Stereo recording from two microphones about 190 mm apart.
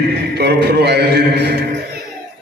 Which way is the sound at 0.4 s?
60° right (ahead or behind).